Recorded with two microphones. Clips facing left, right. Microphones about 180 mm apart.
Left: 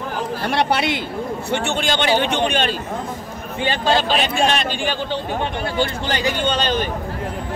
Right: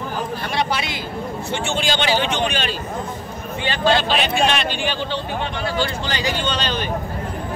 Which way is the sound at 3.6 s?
40° left (ahead or behind).